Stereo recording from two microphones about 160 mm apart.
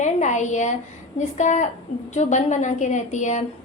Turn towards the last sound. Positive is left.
turn(degrees=50)  # may be behind; listen again after turning